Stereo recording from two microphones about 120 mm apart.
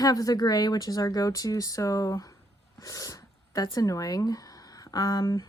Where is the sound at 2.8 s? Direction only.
30° left (ahead or behind).